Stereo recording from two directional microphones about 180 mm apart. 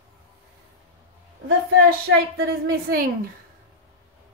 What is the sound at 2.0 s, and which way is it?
A woman's voice, 55° right (ahead or behind).